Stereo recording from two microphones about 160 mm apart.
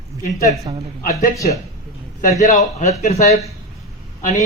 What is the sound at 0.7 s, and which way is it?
Speech, 30° right (ahead or behind).